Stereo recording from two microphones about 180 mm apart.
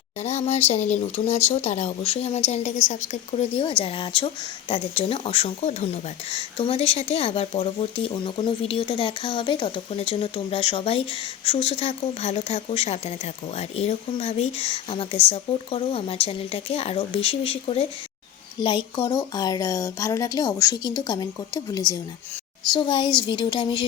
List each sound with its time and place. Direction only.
0.2 s a woman's voice: 35° left (ahead or behind)